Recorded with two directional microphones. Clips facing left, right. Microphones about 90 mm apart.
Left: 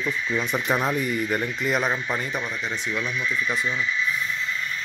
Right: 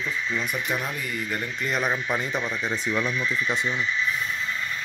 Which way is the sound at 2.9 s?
25° right (ahead or behind).